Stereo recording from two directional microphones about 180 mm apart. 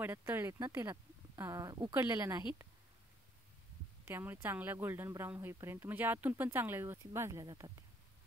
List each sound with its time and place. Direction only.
0.0 s speech: 10° right (ahead or behind)
4.0 s speech: 10° right (ahead or behind)